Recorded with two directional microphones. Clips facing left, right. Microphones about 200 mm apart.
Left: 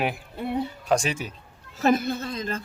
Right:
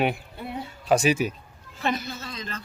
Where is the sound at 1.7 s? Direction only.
45° left (ahead or behind).